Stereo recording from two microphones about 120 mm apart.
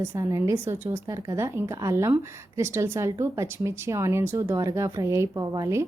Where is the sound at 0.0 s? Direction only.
25° right (ahead or behind).